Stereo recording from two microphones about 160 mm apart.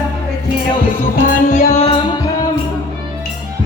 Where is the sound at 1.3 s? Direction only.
45° left (ahead or behind).